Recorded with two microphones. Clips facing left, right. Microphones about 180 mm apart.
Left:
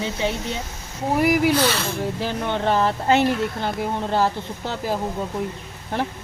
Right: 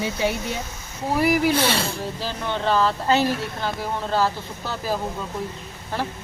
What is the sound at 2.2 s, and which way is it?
Speech, 20° left (ahead or behind).